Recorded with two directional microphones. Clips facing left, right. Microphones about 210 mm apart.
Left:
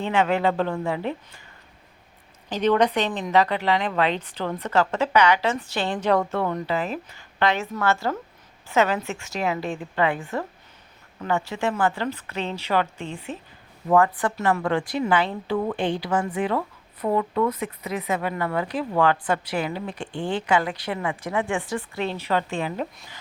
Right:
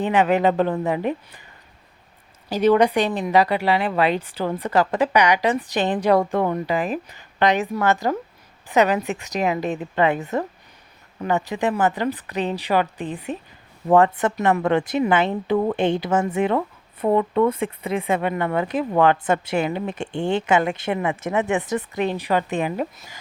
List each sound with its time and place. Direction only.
0.0 s speech: 15° right (ahead or behind)
2.5 s speech: 10° right (ahead or behind)
13.8 s a woman's voice: 30° right (ahead or behind); by 22.9 s 15° right (ahead or behind)